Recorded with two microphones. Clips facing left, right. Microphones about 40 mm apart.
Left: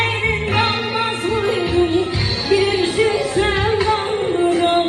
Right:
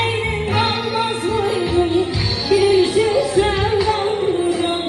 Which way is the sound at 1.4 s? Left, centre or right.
Left.